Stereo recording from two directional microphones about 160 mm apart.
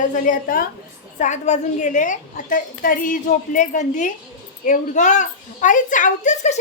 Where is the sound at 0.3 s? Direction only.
60° left (ahead or behind).